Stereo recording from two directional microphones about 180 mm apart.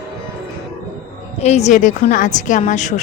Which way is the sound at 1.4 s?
40° left (ahead or behind).